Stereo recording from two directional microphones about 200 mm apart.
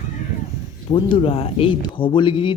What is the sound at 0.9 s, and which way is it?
Speech, 25° left (ahead or behind).